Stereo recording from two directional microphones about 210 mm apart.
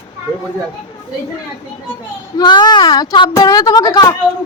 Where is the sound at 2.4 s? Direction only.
20° left (ahead or behind).